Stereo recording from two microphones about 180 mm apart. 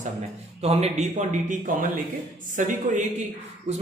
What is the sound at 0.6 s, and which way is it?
A man's voice, 35° right (ahead or behind).